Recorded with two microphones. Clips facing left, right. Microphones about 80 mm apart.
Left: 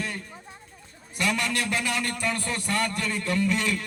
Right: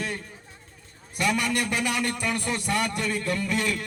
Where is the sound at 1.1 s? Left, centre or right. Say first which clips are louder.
Right 2 dB; centre.